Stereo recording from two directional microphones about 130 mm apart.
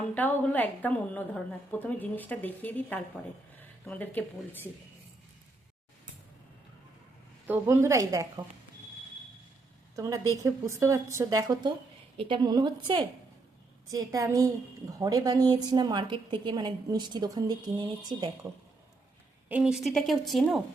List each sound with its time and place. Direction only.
0.1 s a woman's voice: 15° left (ahead or behind)
7.4 s a woman's voice: 15° right (ahead or behind)
9.9 s a woman's voice: 25° right (ahead or behind)
12.1 s a woman's voice: 45° right (ahead or behind)
12.4 s a woman's voice: 30° right (ahead or behind)
19.5 s a woman's voice: 10° right (ahead or behind)